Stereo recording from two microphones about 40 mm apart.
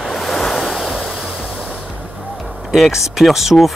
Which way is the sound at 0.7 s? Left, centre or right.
Centre.